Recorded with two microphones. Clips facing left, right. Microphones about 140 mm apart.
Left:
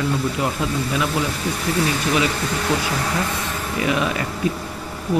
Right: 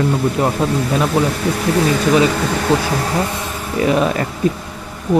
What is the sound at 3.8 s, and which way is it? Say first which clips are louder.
Speech: right 6 dB; 40° right (ahead or behind).